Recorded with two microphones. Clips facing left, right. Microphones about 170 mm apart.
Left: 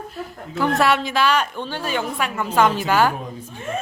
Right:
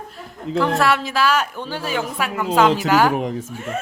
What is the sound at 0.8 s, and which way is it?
A woman's voice, centre (ahead or behind).